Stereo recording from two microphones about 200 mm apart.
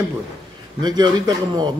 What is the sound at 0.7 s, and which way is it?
Speech, 20° right (ahead or behind).